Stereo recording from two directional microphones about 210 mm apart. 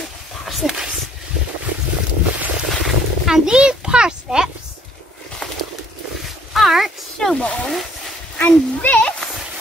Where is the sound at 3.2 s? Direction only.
5° right (ahead or behind).